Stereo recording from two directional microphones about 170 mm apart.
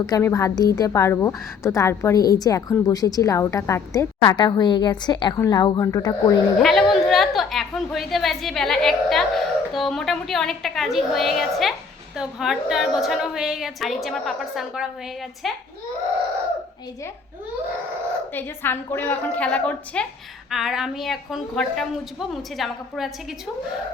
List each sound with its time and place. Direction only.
0.0 s a woman's voice: 20° left (ahead or behind)
6.6 s a woman's voice: centre (ahead or behind)
18.3 s a woman's voice: 10° left (ahead or behind)